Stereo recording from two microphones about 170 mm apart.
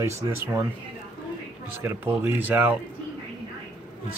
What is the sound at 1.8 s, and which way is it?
Speech, 15° right (ahead or behind).